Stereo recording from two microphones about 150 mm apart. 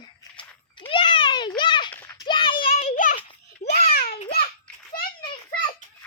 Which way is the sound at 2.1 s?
30° left (ahead or behind).